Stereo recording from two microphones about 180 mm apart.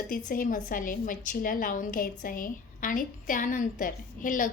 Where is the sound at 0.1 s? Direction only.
50° left (ahead or behind).